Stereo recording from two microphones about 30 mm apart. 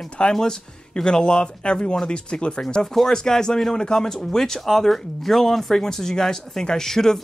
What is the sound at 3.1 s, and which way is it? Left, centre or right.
Speech, centre.